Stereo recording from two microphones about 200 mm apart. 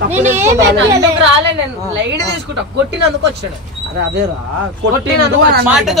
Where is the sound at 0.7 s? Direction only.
65° right (ahead or behind).